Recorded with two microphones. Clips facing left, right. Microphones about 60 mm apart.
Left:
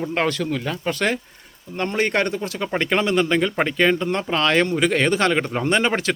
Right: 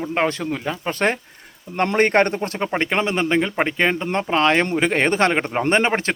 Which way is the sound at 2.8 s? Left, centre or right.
Right.